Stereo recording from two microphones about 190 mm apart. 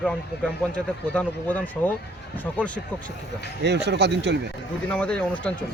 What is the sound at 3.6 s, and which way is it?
Speech, 65° right (ahead or behind).